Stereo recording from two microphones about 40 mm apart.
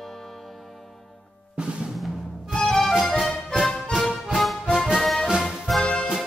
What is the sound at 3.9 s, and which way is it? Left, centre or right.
Music, centre.